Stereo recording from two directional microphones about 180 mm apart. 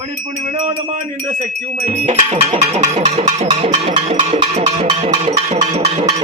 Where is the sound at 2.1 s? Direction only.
30° right (ahead or behind).